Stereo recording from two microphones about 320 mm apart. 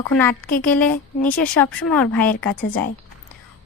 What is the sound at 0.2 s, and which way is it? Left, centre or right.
A woman's voice, centre.